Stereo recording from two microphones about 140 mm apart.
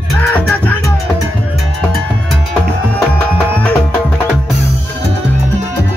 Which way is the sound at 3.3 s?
10° left (ahead or behind).